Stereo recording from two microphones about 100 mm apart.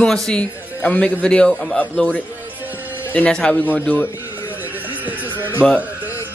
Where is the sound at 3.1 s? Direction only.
10° left (ahead or behind).